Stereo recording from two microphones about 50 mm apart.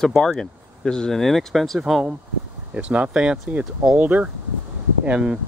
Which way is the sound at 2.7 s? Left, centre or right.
Right.